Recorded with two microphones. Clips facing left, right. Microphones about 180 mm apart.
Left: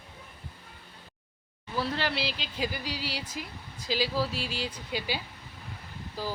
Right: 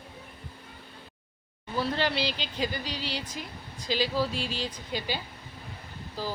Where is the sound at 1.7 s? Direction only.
Centre (ahead or behind).